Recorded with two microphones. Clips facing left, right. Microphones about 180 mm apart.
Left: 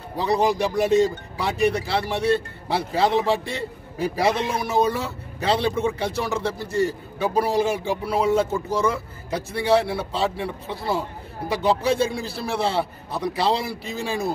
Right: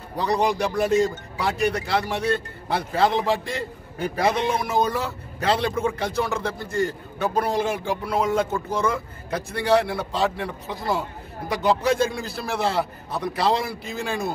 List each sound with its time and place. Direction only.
0.1 s a man's voice: 5° left (ahead or behind)
4.4 s a man's voice: 35° left (ahead or behind)
4.8 s a man's voice: centre (ahead or behind)
12.1 s a man's voice: 30° left (ahead or behind)
12.6 s a man's voice: centre (ahead or behind)